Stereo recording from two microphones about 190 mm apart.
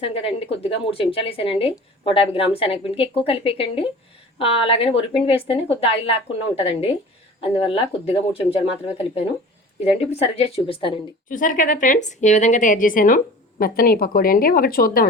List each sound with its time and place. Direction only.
0.0 s a woman's voice: 30° left (ahead or behind)
11.3 s a woman's voice: 45° left (ahead or behind)